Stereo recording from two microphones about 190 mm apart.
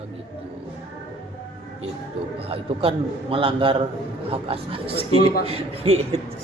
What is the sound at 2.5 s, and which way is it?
A man's voice, 30° right (ahead or behind).